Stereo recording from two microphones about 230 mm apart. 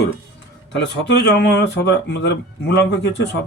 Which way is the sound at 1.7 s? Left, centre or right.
Left.